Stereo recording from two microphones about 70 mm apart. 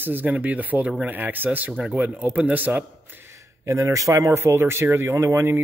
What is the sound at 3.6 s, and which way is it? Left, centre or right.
Speech, right.